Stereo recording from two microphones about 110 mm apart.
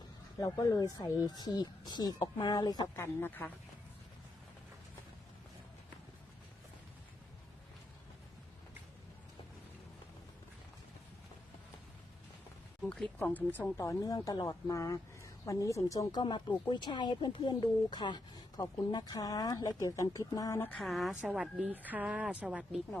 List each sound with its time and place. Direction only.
0.3 s speech: 35° left (ahead or behind)
2.9 s speech: 20° left (ahead or behind)
13.1 s speech: 15° left (ahead or behind); by 16.2 s 30° left (ahead or behind)
16.2 s speech: 45° left (ahead or behind)
20.6 s speech: 15° left (ahead or behind)
20.8 s a woman's voice: centre (ahead or behind)
21.6 s speech: 15° right (ahead or behind)